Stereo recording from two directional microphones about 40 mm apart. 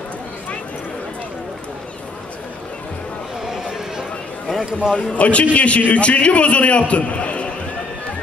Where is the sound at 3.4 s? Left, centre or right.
Centre.